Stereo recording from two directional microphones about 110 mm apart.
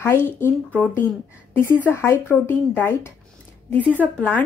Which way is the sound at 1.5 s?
20° left (ahead or behind).